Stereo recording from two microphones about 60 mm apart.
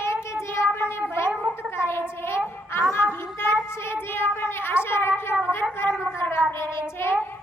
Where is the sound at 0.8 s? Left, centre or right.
Left.